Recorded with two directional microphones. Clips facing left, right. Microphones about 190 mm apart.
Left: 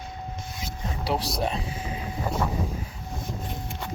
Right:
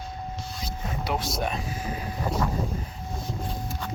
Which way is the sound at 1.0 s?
35° left (ahead or behind).